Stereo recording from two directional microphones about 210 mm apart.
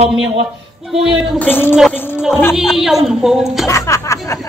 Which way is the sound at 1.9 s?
10° left (ahead or behind).